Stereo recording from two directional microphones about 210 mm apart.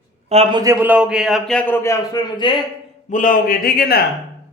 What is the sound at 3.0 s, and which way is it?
Speech, 40° left (ahead or behind).